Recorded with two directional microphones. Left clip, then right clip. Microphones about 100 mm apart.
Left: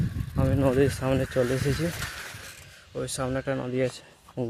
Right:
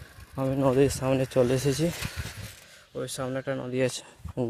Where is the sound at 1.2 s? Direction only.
45° right (ahead or behind).